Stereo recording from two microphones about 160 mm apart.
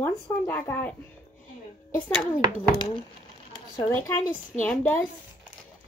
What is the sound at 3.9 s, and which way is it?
Speech, 10° left (ahead or behind).